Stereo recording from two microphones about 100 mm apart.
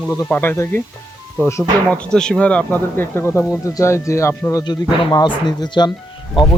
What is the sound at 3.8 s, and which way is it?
Speech, 30° left (ahead or behind).